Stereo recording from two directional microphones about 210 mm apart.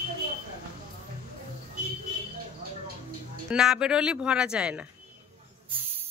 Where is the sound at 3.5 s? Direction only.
5° right (ahead or behind).